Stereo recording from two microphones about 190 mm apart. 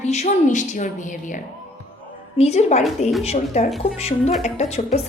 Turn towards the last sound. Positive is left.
turn(degrees=35)  # may be behind; listen again after turning